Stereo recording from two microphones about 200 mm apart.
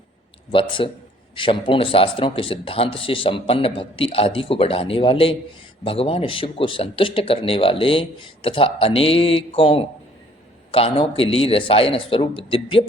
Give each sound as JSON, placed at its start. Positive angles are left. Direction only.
{"t": 0.5, "sound": "speech", "side_deg": 25}